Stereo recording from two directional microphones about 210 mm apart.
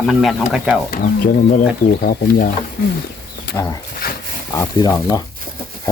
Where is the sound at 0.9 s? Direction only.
45° left (ahead or behind).